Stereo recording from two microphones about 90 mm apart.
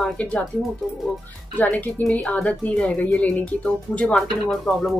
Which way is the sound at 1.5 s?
20° left (ahead or behind).